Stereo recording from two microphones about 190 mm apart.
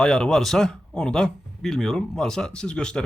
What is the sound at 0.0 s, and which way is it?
A man's voice, 5° left (ahead or behind).